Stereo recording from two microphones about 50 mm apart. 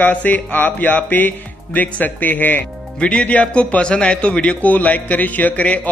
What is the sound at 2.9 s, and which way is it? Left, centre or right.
A man's voice, left.